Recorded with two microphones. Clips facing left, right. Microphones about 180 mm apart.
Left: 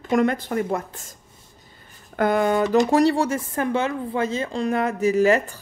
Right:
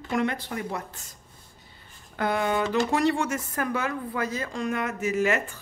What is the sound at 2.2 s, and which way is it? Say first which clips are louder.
A woman's voice: left 6 dB; 45° left (ahead or behind).